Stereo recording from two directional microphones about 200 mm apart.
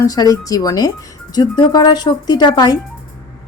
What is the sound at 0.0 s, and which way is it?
A woman's voice, 20° left (ahead or behind).